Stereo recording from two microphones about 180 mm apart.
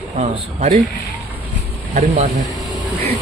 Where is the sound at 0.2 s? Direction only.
40° right (ahead or behind).